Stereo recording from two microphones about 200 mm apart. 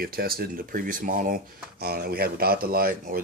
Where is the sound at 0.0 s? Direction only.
50° right (ahead or behind).